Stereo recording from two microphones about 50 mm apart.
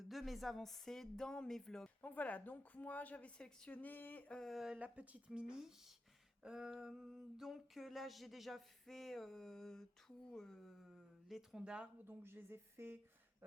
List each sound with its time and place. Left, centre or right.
0.0 s speech: centre
2.0 s a woman's voice: left
3.7 s a woman's voice: left
4.4 s a sound: centre
4.7 s speech: right
6.4 s a sound: centre
11.5 s speech: centre
12.0 s speech: right